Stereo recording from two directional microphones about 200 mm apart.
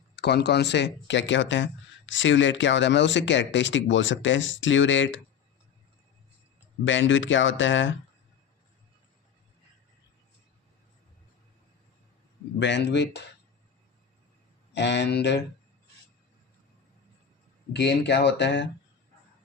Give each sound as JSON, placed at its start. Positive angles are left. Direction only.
{"t": 0.2, "sound": "speech", "side_deg": 55}
{"t": 6.8, "sound": "speech", "side_deg": 70}
{"t": 12.5, "sound": "speech", "side_deg": 60}
{"t": 14.7, "sound": "speech", "side_deg": 60}
{"t": 17.7, "sound": "speech", "side_deg": 60}